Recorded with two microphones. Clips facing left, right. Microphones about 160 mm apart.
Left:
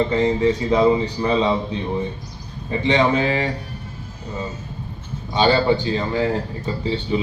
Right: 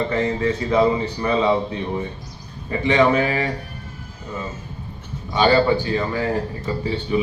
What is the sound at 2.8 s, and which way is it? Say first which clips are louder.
Speech: right 1 dB; 25° left (ahead or behind).